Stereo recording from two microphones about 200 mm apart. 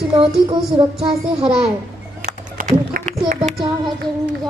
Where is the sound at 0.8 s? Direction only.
25° right (ahead or behind).